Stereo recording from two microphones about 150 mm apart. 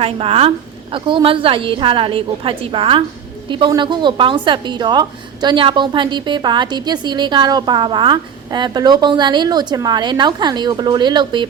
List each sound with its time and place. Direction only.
0.0 s a woman's voice: 40° right (ahead or behind)